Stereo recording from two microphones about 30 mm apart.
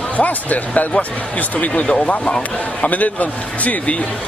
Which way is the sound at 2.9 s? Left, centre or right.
Left.